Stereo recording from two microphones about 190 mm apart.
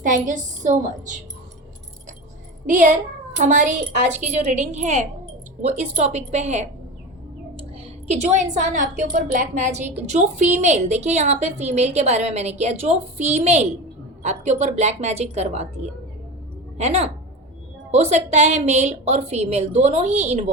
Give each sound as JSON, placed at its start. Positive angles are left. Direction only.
{"t": 0.0, "sound": "a woman's voice", "side_deg": -40}
{"t": 2.6, "sound": "a woman's voice", "side_deg": -40}
{"t": 8.0, "sound": "a woman's voice", "side_deg": -35}